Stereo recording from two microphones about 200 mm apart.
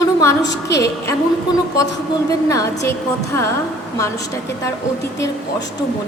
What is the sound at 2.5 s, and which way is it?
Speech, 15° left (ahead or behind).